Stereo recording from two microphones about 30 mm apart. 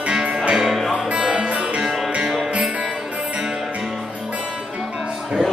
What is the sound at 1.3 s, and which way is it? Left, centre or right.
Music, right.